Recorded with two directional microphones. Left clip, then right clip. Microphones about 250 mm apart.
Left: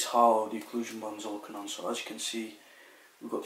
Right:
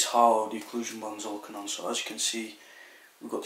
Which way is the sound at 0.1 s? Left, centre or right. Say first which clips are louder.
Right 1 dB; left.